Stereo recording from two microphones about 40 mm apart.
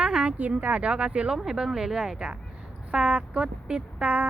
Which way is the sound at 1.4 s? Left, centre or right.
Centre.